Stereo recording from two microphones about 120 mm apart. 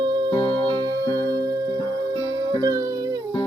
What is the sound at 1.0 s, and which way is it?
Music, 25° left (ahead or behind).